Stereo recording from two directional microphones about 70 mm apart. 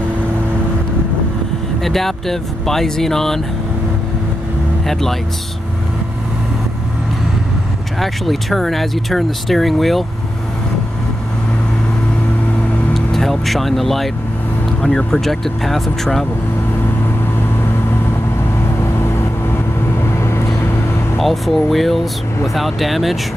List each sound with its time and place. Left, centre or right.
1.8 s speech: centre
8.0 s speech: centre
12.9 s speech: centre
20.2 s vehicle: left
21.2 s speech: centre